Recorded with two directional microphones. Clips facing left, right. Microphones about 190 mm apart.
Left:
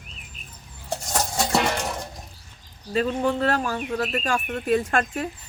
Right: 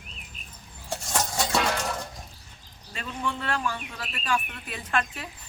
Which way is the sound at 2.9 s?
40° left (ahead or behind).